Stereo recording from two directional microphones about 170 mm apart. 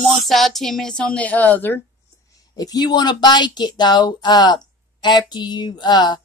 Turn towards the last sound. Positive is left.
turn(degrees=25)  # may be behind; listen again after turning